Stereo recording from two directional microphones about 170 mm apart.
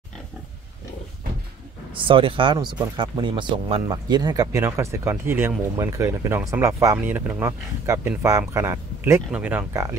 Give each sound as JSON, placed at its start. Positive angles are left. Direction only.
{"t": 2.0, "sound": "speech", "side_deg": -30}